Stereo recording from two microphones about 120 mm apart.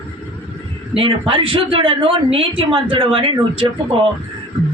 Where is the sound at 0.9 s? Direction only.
50° right (ahead or behind).